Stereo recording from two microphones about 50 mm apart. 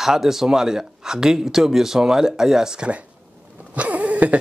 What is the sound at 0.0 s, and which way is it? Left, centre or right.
Speech, centre.